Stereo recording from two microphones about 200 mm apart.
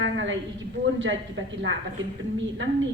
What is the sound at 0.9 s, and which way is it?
Speech, 70° right (ahead or behind).